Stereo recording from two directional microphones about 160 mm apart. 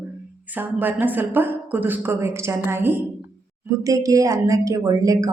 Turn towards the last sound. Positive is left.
turn(degrees=-20)  # may be behind; listen again after turning